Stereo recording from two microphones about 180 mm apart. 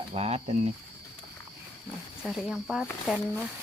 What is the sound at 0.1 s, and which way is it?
Speech, 35° right (ahead or behind).